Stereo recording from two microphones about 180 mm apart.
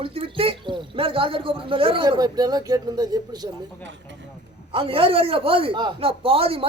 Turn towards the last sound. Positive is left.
turn(degrees=-30)  # may be behind; listen again after turning